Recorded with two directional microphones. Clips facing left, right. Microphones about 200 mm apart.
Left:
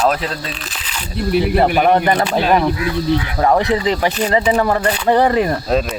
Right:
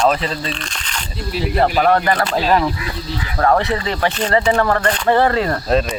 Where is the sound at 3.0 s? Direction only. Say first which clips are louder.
Left 10 dB; 60° left (ahead or behind).